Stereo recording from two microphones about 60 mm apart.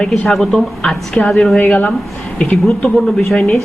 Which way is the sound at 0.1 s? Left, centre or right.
Centre.